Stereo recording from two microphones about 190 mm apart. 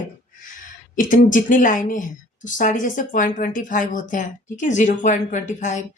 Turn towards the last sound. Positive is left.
turn(degrees=40)  # may be behind; listen again after turning